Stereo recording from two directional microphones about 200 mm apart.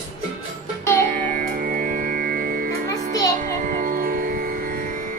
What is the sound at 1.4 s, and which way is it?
Music, 45° right (ahead or behind).